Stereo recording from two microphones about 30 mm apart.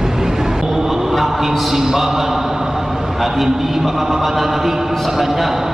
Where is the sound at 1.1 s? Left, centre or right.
Centre.